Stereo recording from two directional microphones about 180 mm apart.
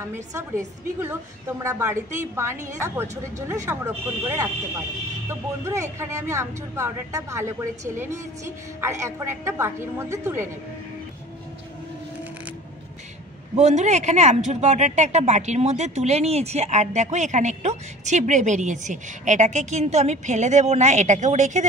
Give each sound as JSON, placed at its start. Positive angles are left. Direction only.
{"t": 0.0, "sound": "a woman's voice", "side_deg": -15}
{"t": 13.6, "sound": "speech", "side_deg": -40}